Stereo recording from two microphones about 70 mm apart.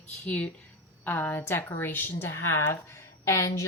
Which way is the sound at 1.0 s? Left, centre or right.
Left.